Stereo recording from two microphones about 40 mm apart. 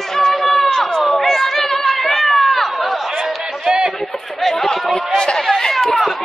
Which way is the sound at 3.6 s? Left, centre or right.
Centre.